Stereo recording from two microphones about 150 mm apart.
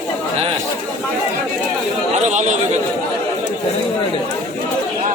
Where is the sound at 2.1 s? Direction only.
55° right (ahead or behind).